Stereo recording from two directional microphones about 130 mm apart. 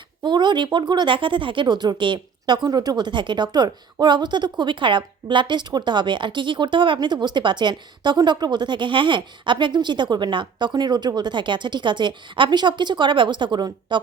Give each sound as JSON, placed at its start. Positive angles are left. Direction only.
{"t": 0.2, "sound": "a woman's voice", "side_deg": -35}